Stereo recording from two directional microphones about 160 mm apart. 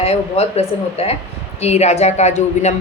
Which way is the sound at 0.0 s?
40° left (ahead or behind).